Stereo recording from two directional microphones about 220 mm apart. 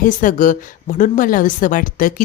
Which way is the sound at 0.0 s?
35° left (ahead or behind).